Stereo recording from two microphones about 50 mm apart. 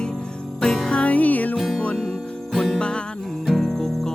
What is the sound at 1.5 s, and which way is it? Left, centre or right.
Music, centre.